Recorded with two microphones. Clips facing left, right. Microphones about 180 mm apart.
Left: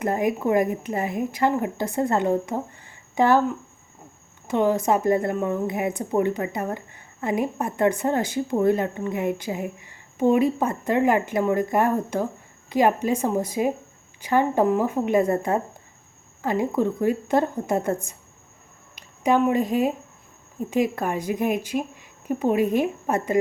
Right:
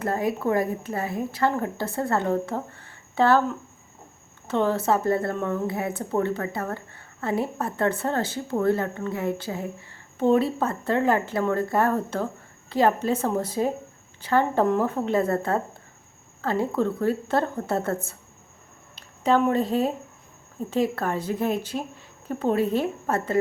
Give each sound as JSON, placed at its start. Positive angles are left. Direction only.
{"t": 0.0, "sound": "a woman's voice", "side_deg": 15}
{"t": 4.4, "sound": "a woman's voice", "side_deg": 15}